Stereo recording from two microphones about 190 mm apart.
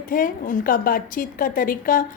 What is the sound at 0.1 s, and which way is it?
A woman's voice, 45° left (ahead or behind).